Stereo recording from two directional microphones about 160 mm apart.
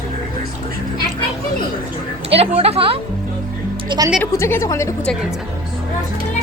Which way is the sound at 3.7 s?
30° right (ahead or behind).